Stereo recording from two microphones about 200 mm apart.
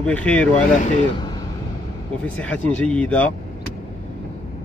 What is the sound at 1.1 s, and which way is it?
Vehicle, 20° left (ahead or behind).